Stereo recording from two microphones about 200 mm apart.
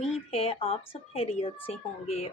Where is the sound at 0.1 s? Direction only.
30° left (ahead or behind).